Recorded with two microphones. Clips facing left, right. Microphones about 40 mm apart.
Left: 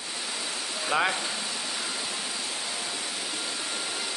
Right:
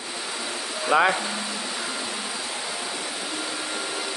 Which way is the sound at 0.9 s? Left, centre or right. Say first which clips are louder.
Right 6 dB; right.